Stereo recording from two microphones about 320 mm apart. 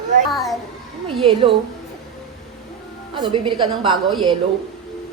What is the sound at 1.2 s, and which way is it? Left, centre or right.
Speech, centre.